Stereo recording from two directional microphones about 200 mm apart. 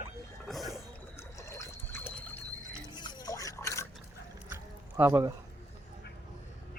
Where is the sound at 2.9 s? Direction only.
20° left (ahead or behind).